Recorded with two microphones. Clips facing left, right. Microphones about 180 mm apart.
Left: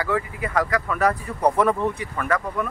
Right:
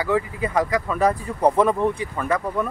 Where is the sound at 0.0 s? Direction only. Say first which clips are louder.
Right 3 dB; 20° right (ahead or behind).